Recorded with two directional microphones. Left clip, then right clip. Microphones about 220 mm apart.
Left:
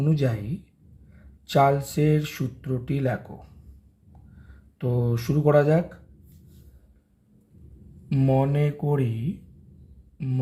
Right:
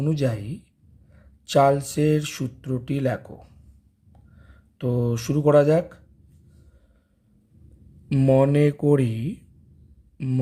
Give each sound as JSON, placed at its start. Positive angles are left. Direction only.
{"t": 0.0, "sound": "speech", "side_deg": -25}
{"t": 4.8, "sound": "speech", "side_deg": -25}
{"t": 8.1, "sound": "speech", "side_deg": -35}